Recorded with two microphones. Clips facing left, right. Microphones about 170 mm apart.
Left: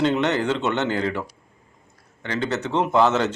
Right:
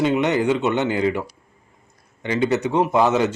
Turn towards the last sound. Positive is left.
turn(degrees=-10)  # may be behind; listen again after turning